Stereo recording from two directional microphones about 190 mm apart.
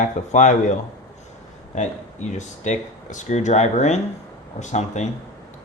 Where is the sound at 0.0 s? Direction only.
40° left (ahead or behind).